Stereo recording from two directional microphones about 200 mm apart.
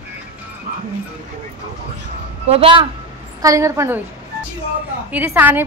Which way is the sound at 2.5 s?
25° right (ahead or behind).